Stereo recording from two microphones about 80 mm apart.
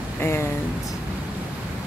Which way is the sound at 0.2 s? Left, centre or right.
Left.